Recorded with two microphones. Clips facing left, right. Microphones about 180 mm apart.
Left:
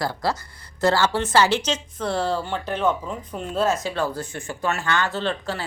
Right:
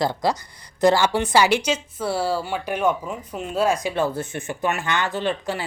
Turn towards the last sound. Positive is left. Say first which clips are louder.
# right 2 dB
turn(degrees=-15)  # may be behind; listen again after turning